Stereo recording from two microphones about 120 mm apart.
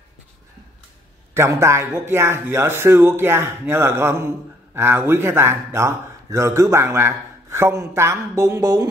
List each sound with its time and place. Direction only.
1.3 s a man's voice: 25° right (ahead or behind)